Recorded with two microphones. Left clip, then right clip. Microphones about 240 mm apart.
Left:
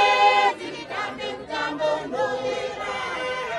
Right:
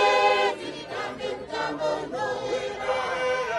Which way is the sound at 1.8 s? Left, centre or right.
Left.